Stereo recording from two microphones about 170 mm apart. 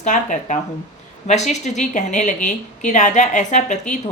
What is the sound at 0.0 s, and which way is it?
A woman's voice, 45° left (ahead or behind).